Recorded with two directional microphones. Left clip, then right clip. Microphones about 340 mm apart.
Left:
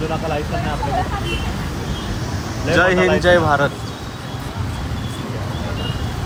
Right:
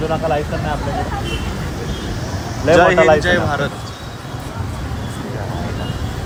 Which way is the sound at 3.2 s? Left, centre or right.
Centre.